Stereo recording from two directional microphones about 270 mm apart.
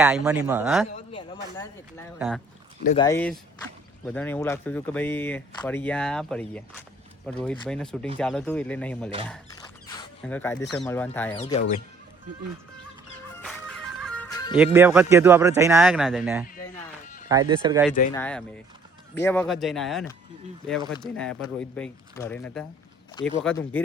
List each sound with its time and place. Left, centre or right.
0.0 s speech: centre
0.9 s a sound: centre
2.1 s speech: centre
3.0 s speech: centre
11.3 s speech: left
13.4 s music: centre
14.5 s speech: centre
18.1 s speech: centre